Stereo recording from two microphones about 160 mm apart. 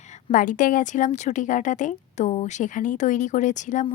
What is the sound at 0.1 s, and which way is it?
Speech, 55° left (ahead or behind).